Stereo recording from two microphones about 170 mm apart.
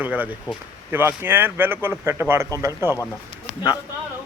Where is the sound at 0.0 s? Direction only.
10° right (ahead or behind).